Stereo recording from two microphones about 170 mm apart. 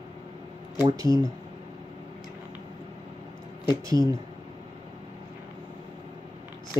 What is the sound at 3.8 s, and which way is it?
Speech, 20° right (ahead or behind).